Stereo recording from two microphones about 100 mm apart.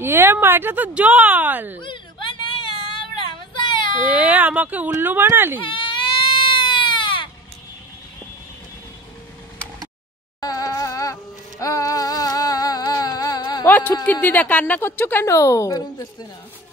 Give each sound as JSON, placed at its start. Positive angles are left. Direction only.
{"t": 0.0, "sound": "speech", "side_deg": -25}
{"t": 1.8, "sound": "a sound", "side_deg": 55}
{"t": 3.5, "sound": "baby cry", "side_deg": 50}
{"t": 4.1, "sound": "speech", "side_deg": -15}
{"t": 5.6, "sound": "baby cry", "side_deg": 55}
{"t": 10.4, "sound": "music", "side_deg": 35}
{"t": 13.7, "sound": "a sound", "side_deg": 20}
{"t": 14.2, "sound": "a woman's voice", "side_deg": 15}
{"t": 15.3, "sound": "a woman's voice", "side_deg": 30}